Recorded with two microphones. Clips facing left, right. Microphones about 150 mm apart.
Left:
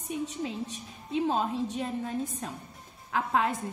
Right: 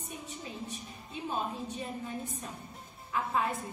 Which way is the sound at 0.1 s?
90° left.